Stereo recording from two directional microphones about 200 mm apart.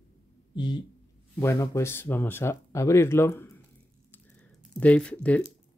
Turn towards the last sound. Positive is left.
turn(degrees=5)  # may be behind; listen again after turning